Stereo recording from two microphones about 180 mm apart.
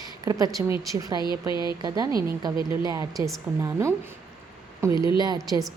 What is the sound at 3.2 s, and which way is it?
Speech, 15° right (ahead or behind).